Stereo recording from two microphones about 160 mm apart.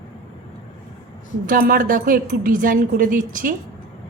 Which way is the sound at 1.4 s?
60° right (ahead or behind).